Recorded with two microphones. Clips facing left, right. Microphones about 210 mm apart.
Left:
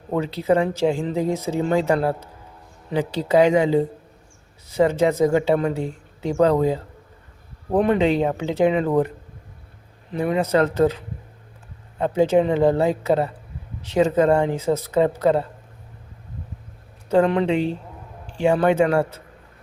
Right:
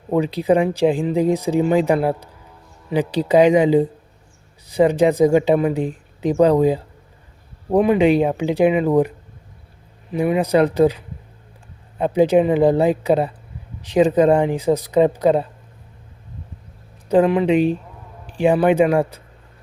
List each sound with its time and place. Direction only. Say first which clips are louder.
0.1 s speech: right 3 dB; 15° right (ahead or behind)
17.1 s speech: right 3 dB; 10° right (ahead or behind)